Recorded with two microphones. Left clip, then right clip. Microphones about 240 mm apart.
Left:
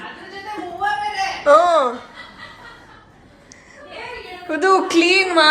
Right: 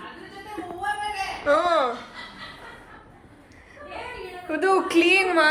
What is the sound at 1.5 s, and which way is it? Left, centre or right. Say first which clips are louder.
Speech: left 8 dB; left.